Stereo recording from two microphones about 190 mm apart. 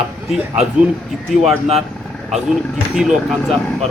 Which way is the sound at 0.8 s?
5° right (ahead or behind).